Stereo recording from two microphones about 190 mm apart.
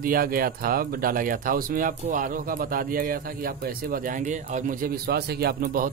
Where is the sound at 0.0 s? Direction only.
50° right (ahead or behind).